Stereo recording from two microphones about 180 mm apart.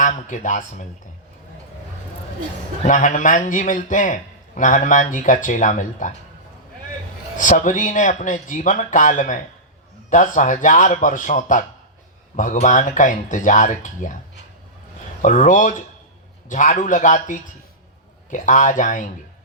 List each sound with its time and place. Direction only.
0.0 s a man's voice: 45° left (ahead or behind)
2.8 s a man's voice: 45° left (ahead or behind)
7.3 s a man's voice: 45° left (ahead or behind)
15.2 s a man's voice: 45° left (ahead or behind)